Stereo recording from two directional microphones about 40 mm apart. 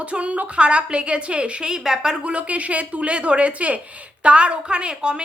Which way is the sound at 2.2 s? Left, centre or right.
Right.